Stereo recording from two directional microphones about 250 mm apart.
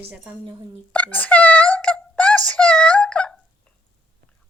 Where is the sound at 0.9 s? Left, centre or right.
Centre.